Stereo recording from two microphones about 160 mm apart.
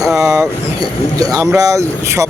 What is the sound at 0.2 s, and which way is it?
Vehicle, 20° right (ahead or behind).